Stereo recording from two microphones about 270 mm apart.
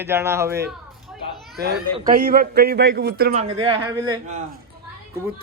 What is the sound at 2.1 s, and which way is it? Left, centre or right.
Speech, right.